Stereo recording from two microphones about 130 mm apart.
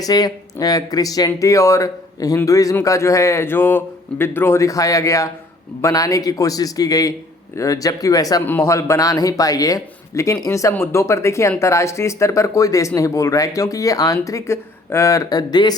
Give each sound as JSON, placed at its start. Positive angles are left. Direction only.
{"t": 0.0, "sound": "a man's voice", "side_deg": 30}